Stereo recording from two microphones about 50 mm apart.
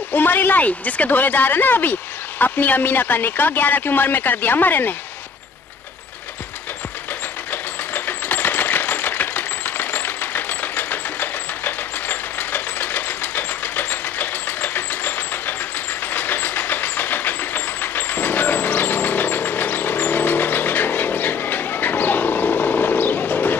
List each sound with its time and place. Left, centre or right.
0.1 s speech: left
7.9 s sewing machine: left
16.1 s vehicle: left